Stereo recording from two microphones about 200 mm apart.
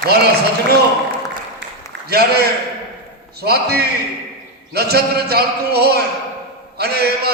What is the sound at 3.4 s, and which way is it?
A man's voice, 55° right (ahead or behind).